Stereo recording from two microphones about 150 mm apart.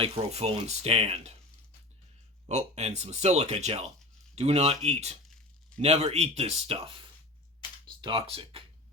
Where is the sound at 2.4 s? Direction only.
50° right (ahead or behind).